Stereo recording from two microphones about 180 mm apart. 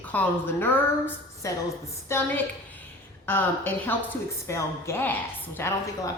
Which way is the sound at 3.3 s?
10° left (ahead or behind).